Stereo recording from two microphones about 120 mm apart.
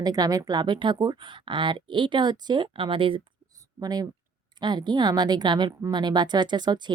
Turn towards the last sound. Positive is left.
turn(degrees=-40)  # may be behind; listen again after turning